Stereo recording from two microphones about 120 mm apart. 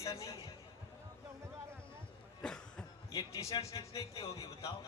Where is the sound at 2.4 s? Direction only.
5° left (ahead or behind).